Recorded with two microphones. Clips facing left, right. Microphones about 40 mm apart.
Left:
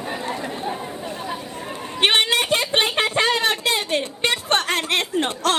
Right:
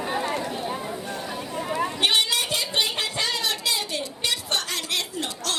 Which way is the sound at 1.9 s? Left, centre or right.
Left.